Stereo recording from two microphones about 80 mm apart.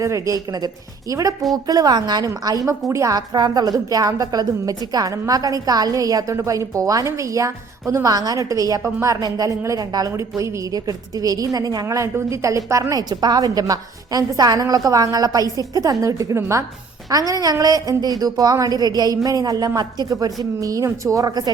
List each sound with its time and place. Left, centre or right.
0.0 s a woman's voice: right
3.2 s a woman's voice: right
8.8 s a woman's voice: right
9.2 s a woman's voice: right